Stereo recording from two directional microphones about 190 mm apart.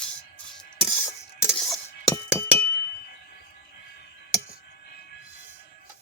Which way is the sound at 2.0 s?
15° left (ahead or behind).